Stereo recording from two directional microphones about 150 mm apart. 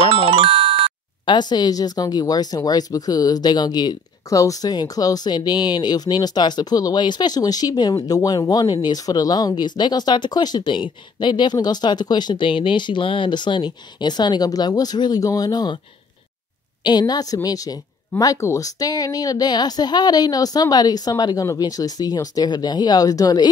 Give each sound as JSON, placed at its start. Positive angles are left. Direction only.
{"t": 0.1, "sound": "music", "side_deg": -35}
{"t": 1.2, "sound": "speech", "side_deg": 30}
{"t": 16.8, "sound": "speech", "side_deg": 30}